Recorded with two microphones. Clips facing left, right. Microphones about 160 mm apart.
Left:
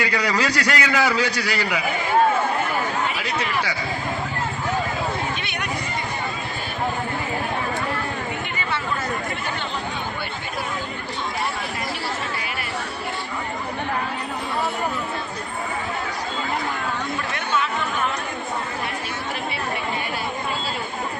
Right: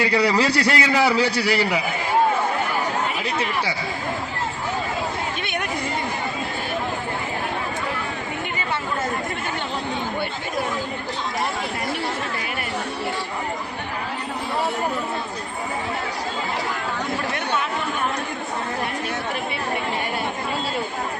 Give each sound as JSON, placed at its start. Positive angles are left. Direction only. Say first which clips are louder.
{"t": 0.0, "sound": "a man's voice", "louder": "right 3 dB", "side_deg": -30}
{"t": 3.2, "sound": "a man's voice", "louder": "right 1 dB", "side_deg": -30}